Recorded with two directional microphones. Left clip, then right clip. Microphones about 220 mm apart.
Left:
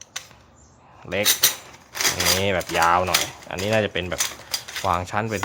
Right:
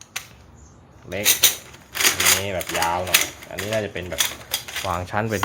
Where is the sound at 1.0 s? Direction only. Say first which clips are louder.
Right 1 dB; 20° left (ahead or behind).